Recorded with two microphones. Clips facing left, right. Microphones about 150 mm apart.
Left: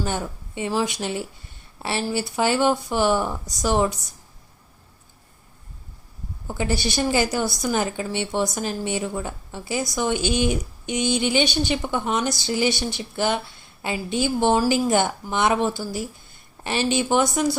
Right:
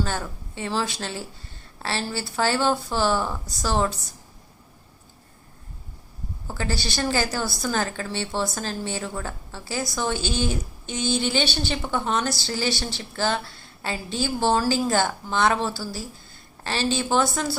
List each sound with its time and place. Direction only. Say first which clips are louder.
0.0 s speech: left 2 dB; 20° left (ahead or behind)
6.5 s speech: left 4 dB; 20° left (ahead or behind)